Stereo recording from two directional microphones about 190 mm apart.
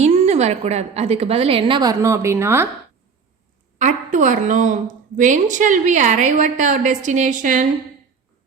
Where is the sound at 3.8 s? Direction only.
40° right (ahead or behind).